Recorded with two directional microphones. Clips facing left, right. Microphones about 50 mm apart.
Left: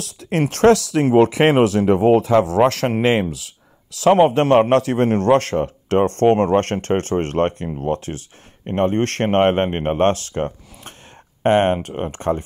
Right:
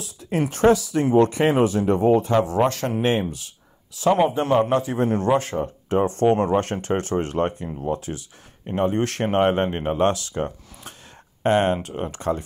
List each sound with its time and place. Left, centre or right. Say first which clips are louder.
0.0 s a man's voice: left 3 dB; left